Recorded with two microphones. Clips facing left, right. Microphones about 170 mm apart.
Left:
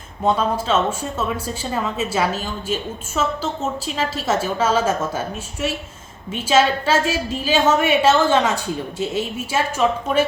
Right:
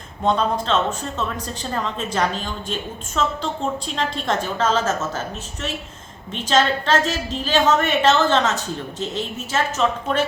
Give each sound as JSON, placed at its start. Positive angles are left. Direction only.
{"t": 0.3, "sound": "a woman's voice", "side_deg": 5}
{"t": 6.3, "sound": "a woman's voice", "side_deg": 10}